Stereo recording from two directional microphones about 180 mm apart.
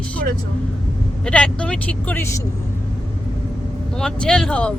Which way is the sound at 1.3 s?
5° left (ahead or behind).